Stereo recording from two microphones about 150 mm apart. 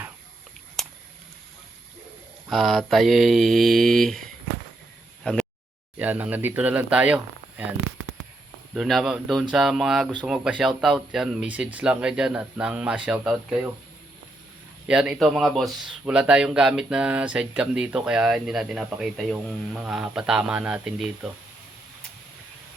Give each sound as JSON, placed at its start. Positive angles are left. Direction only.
{"t": 2.5, "sound": "speech", "side_deg": 0}
{"t": 5.2, "sound": "a sound", "side_deg": 5}
{"t": 6.0, "sound": "speech", "side_deg": -10}
{"t": 8.7, "sound": "speech", "side_deg": 0}
{"t": 14.8, "sound": "speech", "side_deg": -5}